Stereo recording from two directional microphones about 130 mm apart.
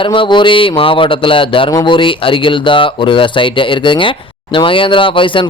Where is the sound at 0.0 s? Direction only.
40° left (ahead or behind).